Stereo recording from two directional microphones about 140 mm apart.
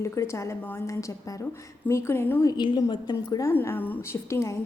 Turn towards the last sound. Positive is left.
turn(degrees=20)  # may be behind; listen again after turning